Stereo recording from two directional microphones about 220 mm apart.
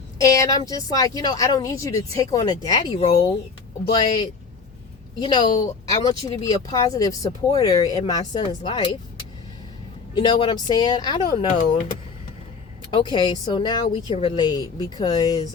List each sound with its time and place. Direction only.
0.2 s speech: 15° left (ahead or behind)
10.2 s speech: 20° left (ahead or behind)
12.9 s speech: 20° left (ahead or behind)